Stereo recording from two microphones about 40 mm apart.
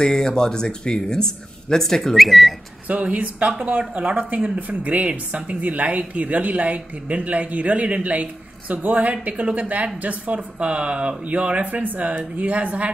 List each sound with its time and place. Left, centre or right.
0.0 s speech: centre
2.1 s speech: centre
2.9 s a woman's voice: right